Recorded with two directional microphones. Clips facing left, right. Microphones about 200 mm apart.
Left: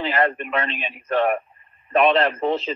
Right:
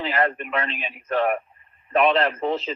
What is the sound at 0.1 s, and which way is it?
Speech, 30° left (ahead or behind).